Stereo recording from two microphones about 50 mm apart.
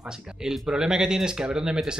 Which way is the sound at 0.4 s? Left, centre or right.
Centre.